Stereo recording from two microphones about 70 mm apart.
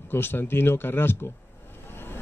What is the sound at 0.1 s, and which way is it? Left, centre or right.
A man's voice, left.